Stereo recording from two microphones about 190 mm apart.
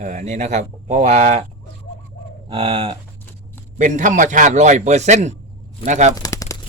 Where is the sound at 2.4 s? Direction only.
30° right (ahead or behind).